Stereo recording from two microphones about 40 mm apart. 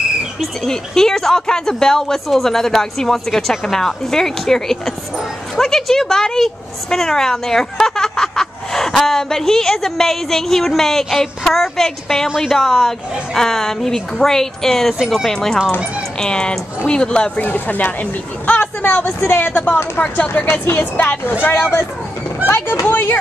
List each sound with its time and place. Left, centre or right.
0.7 s speech: centre
15.0 s speech: centre
15.2 s speech: centre
16.2 s speech: left
17.4 s speech: left
18.6 s a sound: left
19.0 s a woman's voice: left
20.0 s speech: left
20.6 s speech: left
21.5 s speech: left
22.8 s a woman's voice: left